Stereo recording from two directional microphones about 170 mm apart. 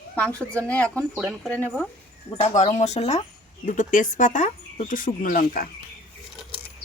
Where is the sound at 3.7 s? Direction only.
50° left (ahead or behind).